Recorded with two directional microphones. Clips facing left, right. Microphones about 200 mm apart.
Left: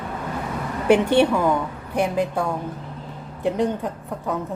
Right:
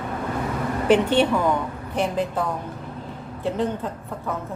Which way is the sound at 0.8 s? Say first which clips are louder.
Left 2 dB; 10° left (ahead or behind).